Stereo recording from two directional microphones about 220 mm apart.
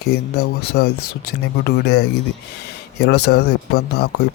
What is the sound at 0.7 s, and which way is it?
Speech, 50° left (ahead or behind).